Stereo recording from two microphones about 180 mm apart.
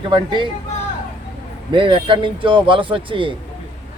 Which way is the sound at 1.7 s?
30° right (ahead or behind).